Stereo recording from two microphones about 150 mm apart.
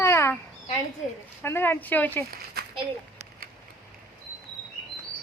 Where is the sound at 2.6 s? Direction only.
90° right.